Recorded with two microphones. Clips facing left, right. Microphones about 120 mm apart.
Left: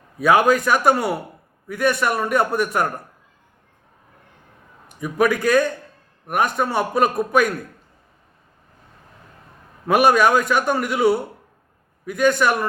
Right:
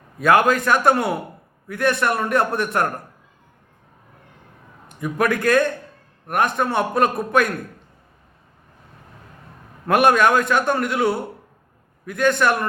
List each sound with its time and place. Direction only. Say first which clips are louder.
0.2 s a man's voice: left 1 dB; 5° left (ahead or behind)
4.9 s a man's voice: left 2 dB; 5° left (ahead or behind)
9.8 s a man's voice: even; 5° left (ahead or behind)